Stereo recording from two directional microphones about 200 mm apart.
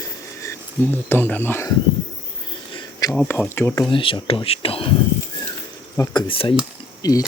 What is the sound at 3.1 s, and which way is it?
Speech, 5° left (ahead or behind).